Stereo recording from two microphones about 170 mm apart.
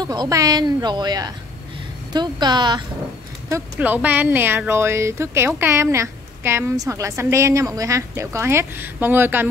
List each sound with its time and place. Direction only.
0.0 s speech: 25° right (ahead or behind)
3.7 s a woman's voice: 10° right (ahead or behind)